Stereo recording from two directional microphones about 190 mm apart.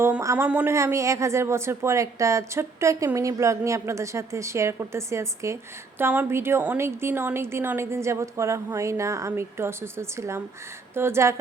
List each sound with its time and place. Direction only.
0.0 s speech: 15° right (ahead or behind)